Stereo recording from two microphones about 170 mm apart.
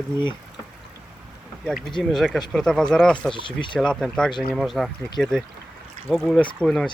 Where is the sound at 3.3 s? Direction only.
30° left (ahead or behind).